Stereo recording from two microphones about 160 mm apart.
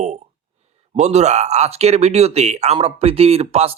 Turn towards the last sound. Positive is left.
turn(degrees=-40)  # may be behind; listen again after turning